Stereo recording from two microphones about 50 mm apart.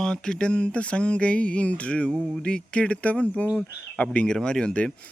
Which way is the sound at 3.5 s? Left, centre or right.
Left.